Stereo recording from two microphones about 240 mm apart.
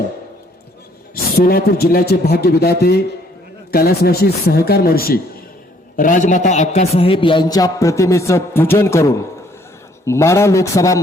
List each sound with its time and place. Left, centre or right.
1.1 s a man's voice: left; by 11.0 s centre